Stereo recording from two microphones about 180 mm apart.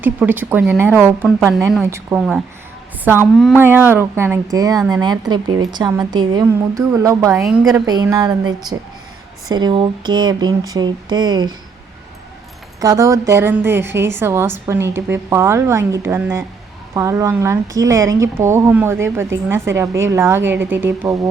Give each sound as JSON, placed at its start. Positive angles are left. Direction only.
{"t": 0.0, "sound": "a woman's voice", "side_deg": -10}
{"t": 12.8, "sound": "speech", "side_deg": -20}